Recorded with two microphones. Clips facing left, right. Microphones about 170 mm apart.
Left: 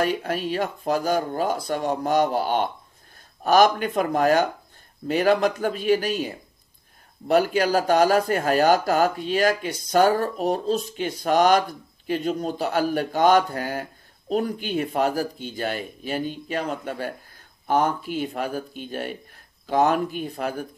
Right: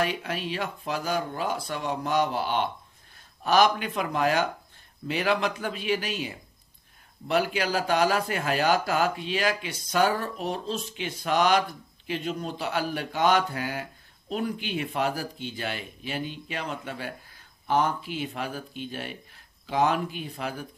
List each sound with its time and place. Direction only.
0.0 s speech: 45° left (ahead or behind)